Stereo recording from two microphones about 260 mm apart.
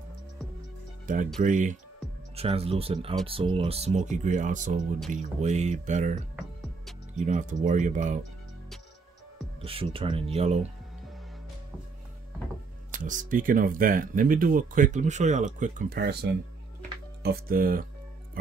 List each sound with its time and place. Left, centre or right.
1.1 s speech: right
9.6 s speech: right
12.9 s speech: right